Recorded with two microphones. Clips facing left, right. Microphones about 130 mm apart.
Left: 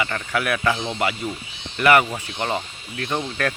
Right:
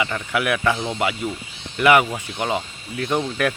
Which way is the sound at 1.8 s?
15° right (ahead or behind).